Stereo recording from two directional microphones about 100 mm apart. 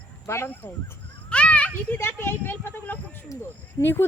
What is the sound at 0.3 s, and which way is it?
Speech, 25° left (ahead or behind).